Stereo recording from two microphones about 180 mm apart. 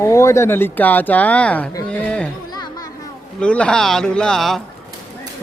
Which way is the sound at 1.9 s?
5° left (ahead or behind).